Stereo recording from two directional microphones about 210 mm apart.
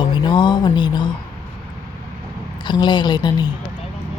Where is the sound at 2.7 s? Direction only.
20° left (ahead or behind).